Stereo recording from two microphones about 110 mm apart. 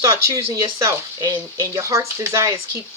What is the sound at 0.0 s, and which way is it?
Speech, 25° right (ahead or behind).